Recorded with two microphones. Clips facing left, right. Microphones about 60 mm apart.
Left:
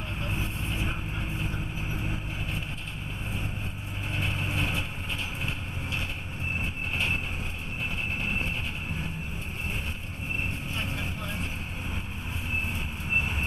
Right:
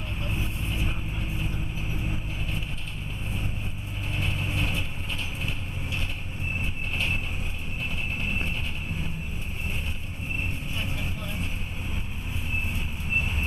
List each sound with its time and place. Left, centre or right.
0.2 s vehicle: centre
4.1 s vehicle: centre
6.6 s vehicle: centre